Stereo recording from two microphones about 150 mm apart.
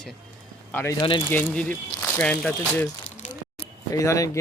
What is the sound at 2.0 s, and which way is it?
Speech, 10° left (ahead or behind).